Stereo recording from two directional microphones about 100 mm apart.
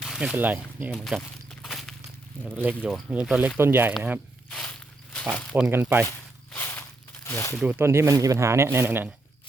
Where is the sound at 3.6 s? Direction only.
20° right (ahead or behind).